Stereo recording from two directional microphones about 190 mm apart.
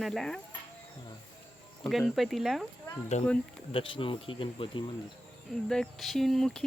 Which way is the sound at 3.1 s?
40° left (ahead or behind).